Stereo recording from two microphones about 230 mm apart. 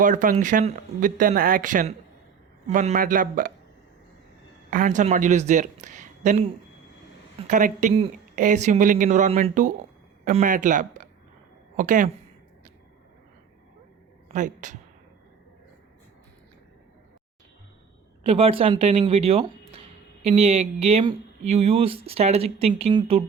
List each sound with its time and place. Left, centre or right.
0.0 s speech: right
4.7 s speech: right
14.3 s speech: right
18.2 s speech: right